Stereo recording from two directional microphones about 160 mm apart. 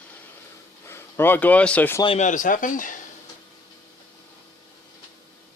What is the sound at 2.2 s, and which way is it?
Speech, 50° left (ahead or behind).